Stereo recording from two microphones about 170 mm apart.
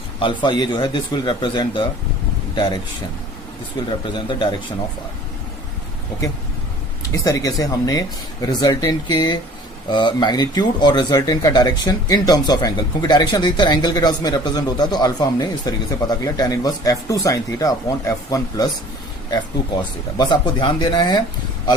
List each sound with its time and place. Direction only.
0.2 s speech: 30° left (ahead or behind)
3.8 s speech: 30° left (ahead or behind)
7.1 s speech: 20° left (ahead or behind)
20.1 s speech: 25° left (ahead or behind)